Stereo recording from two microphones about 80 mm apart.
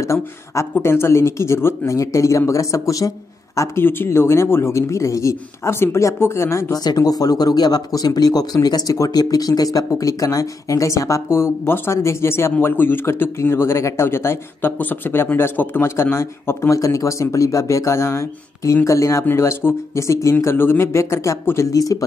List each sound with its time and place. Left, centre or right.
0.0 s speech: left
6.7 s speech: left